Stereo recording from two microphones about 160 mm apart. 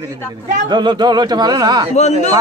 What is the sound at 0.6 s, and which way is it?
Speech, 30° right (ahead or behind).